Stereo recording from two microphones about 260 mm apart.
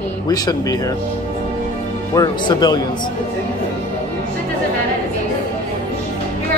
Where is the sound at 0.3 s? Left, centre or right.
Centre.